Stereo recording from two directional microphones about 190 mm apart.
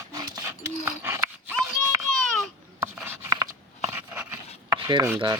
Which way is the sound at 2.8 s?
10° right (ahead or behind).